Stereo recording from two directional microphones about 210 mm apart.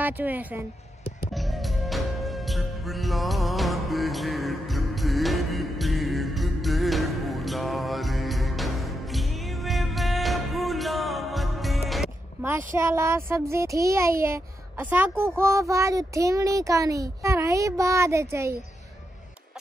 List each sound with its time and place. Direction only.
0.0 s speech: 10° right (ahead or behind)
1.3 s music: centre (ahead or behind)
12.7 s speech: 15° right (ahead or behind)